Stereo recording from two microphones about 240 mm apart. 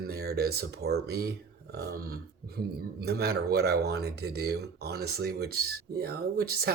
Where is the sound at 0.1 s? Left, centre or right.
Right.